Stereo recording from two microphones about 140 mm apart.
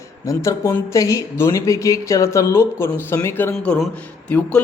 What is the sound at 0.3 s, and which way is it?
A man's voice, 20° left (ahead or behind).